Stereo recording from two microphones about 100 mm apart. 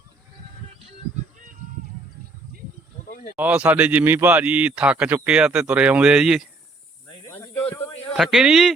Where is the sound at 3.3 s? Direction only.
15° right (ahead or behind).